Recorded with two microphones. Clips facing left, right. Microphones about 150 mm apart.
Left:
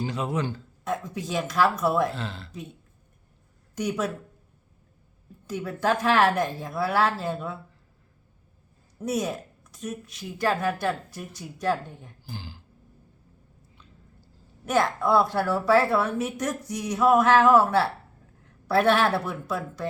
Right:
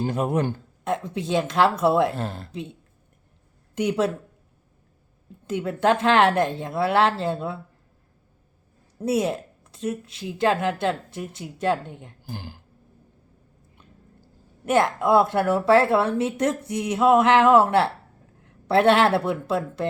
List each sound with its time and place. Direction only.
0.0 s a man's voice: 50° right (ahead or behind)
0.9 s a woman's voice: 25° right (ahead or behind)
2.1 s a man's voice: 50° right (ahead or behind)
2.5 s a woman's voice: 25° right (ahead or behind)
3.8 s a woman's voice: 25° right (ahead or behind)
5.5 s a woman's voice: 25° right (ahead or behind)
9.0 s a woman's voice: 25° right (ahead or behind)
12.2 s speech: 50° right (ahead or behind)
14.7 s a woman's voice: 20° right (ahead or behind)